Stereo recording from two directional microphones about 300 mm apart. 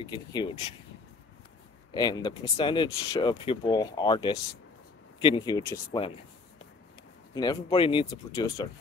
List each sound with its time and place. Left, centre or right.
0.1 s speech: centre
2.0 s speech: centre
7.3 s speech: centre